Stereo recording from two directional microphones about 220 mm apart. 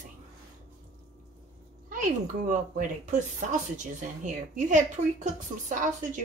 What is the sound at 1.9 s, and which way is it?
A woman's voice, 35° right (ahead or behind).